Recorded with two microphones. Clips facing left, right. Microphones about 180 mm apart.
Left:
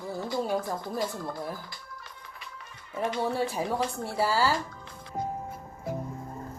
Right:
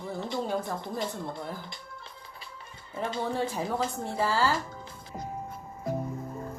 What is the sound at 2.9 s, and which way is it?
Speech, 30° right (ahead or behind).